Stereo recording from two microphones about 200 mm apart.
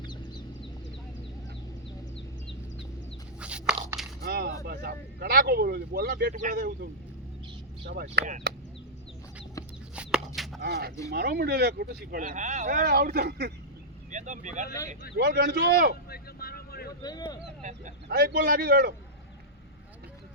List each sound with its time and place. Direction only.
3.4 s a sound: 5° right (ahead or behind)
4.2 s a sound: 50° right (ahead or behind)
4.6 s speech: 50° right (ahead or behind)
7.9 s speech: 55° right (ahead or behind)
9.6 s chicken: 15° left (ahead or behind)
9.9 s chicken: 5° right (ahead or behind)
10.6 s speech: 50° right (ahead or behind)
14.1 s speech: 40° right (ahead or behind)
15.1 s speech: 55° right (ahead or behind)
16.0 s vehicle: 50° left (ahead or behind)
17.0 s speech: 20° left (ahead or behind)
17.6 s a sound: 40° right (ahead or behind)
18.1 s speech: 55° right (ahead or behind)